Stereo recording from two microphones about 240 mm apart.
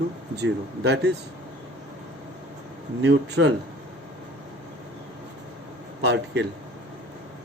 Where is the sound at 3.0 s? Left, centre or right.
Right.